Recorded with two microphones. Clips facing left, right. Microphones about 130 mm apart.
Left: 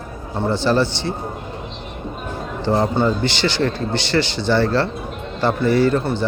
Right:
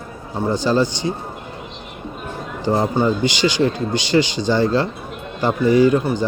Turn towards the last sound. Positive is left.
turn(degrees=-15)  # may be behind; listen again after turning